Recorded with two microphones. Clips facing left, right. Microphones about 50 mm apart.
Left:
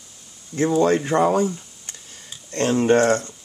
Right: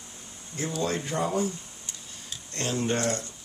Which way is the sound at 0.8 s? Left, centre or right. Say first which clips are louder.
Left 11 dB; left.